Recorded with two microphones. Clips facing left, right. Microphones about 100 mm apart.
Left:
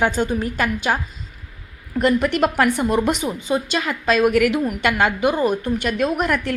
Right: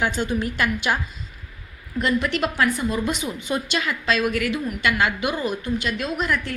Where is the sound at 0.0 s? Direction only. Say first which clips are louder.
Left 4 dB; 45° left (ahead or behind).